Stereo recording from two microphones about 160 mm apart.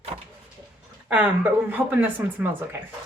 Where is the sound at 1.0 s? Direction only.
10° right (ahead or behind).